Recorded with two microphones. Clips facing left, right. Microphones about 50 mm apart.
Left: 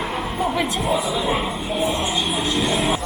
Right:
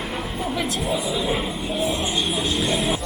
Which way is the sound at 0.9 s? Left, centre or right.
Centre.